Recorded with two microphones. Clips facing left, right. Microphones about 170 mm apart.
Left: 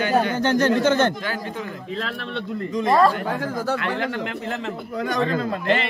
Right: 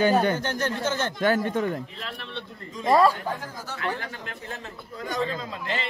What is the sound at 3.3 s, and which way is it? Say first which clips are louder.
A man's voice: left 10 dB; 75° left (ahead or behind).